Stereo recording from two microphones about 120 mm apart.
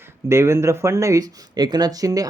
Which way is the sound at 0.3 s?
20° right (ahead or behind).